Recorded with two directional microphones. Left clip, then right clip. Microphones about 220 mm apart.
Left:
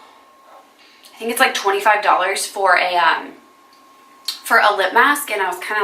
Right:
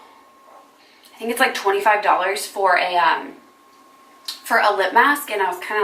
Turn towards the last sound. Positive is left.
turn(degrees=-5)  # may be behind; listen again after turning